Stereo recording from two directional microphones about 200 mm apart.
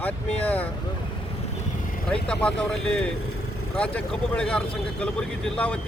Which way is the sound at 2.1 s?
5° left (ahead or behind).